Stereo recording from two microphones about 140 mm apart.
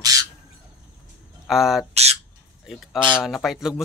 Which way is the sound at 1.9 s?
50° right (ahead or behind).